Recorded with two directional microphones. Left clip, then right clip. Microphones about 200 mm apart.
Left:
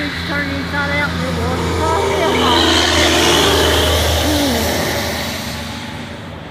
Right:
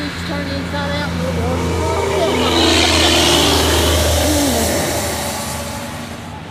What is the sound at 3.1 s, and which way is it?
Vehicle, 55° right (ahead or behind).